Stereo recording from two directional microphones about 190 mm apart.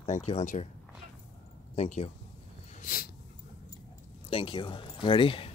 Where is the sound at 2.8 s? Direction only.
50° left (ahead or behind).